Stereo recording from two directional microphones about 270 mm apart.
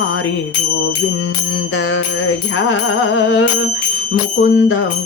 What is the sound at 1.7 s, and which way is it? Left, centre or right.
Music, left.